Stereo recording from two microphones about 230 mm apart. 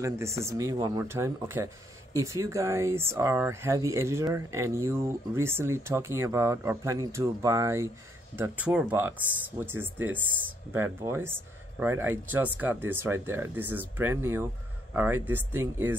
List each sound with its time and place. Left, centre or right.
0.0 s speech: centre